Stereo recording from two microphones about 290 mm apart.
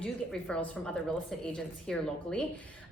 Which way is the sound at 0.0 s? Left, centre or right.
Centre.